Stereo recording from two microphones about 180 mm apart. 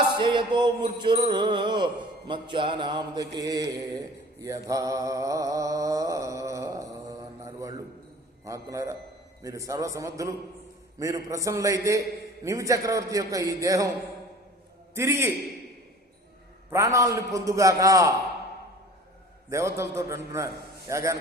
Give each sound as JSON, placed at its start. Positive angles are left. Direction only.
{"t": 0.2, "sound": "mantra", "side_deg": -25}
{"t": 8.4, "sound": "a man's voice", "side_deg": -15}
{"t": 14.9, "sound": "a man's voice", "side_deg": -15}
{"t": 16.6, "sound": "a man's voice", "side_deg": -15}
{"t": 19.5, "sound": "a man's voice", "side_deg": -15}